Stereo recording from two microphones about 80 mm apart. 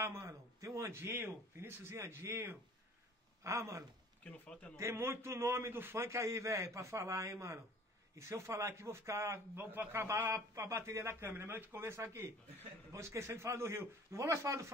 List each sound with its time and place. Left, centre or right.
0.0 s a man's voice: right
4.2 s speech: centre
4.7 s a man's voice: right
9.7 s a man's voice: right
10.0 s a man's voice: right